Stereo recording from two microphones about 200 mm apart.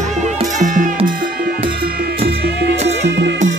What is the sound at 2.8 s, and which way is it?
Music, 60° right (ahead or behind).